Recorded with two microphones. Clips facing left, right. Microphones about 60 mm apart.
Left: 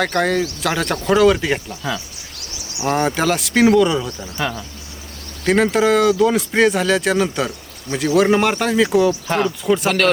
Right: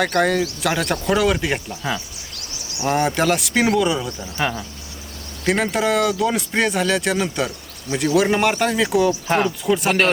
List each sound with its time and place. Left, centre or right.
0.0 s speech: centre
4.4 s speech: centre
5.6 s speech: centre